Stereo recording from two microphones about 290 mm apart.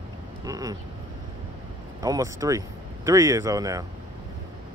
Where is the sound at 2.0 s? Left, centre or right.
Centre.